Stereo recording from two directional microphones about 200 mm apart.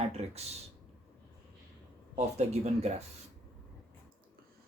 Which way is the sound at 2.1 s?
35° right (ahead or behind).